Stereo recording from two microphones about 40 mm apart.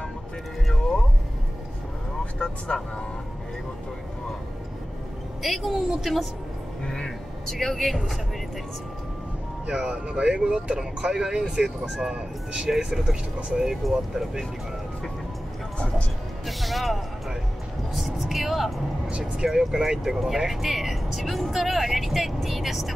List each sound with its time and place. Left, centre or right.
2.3 s speech: left
5.4 s speech: centre
6.8 s vehicle: centre
7.4 s speech: centre
9.7 s speech: right
16.4 s speech: centre
19.0 s speech: right
19.4 s speech: centre